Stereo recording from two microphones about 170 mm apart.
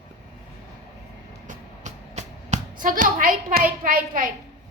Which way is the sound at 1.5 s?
45° right (ahead or behind).